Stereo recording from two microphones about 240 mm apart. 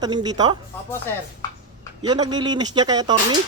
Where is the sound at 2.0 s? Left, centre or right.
Centre.